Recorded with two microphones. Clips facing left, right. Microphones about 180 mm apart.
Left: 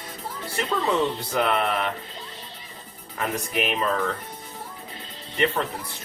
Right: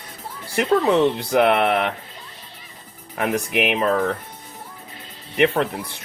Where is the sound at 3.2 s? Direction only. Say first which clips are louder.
Right 5 dB; 75° right (ahead or behind).